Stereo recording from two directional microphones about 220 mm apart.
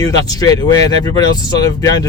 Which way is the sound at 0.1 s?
15° left (ahead or behind).